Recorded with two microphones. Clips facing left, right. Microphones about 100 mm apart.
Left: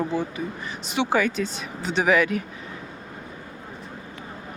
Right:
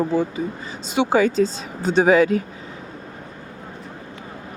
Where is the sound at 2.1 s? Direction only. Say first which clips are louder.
Right 5 dB; 30° right (ahead or behind).